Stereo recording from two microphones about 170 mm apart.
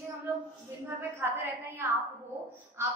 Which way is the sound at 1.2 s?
15° right (ahead or behind).